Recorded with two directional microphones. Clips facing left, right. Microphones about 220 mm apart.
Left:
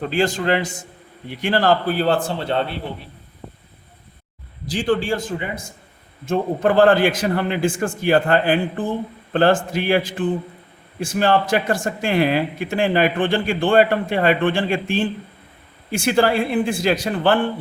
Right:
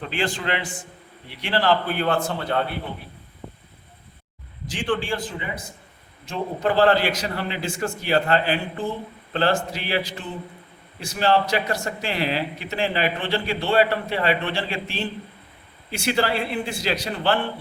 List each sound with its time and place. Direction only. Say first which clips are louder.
0.0 s a man's voice: left 6 dB; 40° left (ahead or behind)
4.6 s a man's voice: left 5 dB; 35° left (ahead or behind)